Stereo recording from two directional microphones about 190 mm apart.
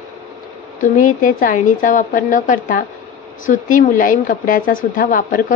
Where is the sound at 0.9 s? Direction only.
45° left (ahead or behind).